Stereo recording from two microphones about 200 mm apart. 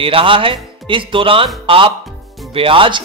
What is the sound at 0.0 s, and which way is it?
Speech, 25° right (ahead or behind).